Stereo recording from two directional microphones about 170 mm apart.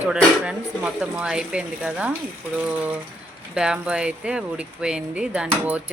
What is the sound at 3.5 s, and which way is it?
Speech, 5° right (ahead or behind).